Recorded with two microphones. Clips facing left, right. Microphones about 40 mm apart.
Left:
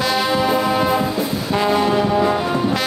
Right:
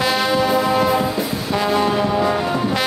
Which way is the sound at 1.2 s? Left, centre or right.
Centre.